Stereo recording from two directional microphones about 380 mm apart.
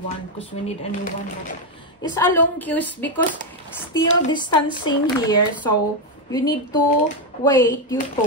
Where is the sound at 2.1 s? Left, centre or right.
Centre.